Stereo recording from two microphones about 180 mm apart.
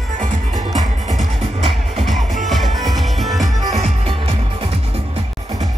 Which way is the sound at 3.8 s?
35° right (ahead or behind).